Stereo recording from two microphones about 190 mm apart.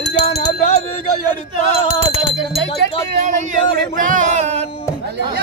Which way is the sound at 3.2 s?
45° right (ahead or behind).